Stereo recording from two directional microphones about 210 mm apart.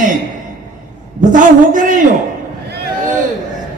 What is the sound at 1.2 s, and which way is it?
Speech, 40° right (ahead or behind).